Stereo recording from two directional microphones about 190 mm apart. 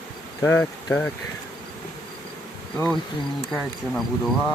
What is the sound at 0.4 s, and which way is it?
Speech, 10° left (ahead or behind).